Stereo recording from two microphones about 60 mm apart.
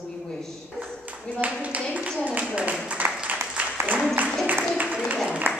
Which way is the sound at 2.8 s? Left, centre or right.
Right.